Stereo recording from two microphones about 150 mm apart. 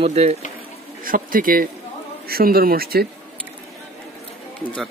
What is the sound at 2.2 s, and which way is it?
Speech, 90° right.